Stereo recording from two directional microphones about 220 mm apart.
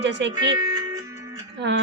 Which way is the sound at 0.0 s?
50° right (ahead or behind).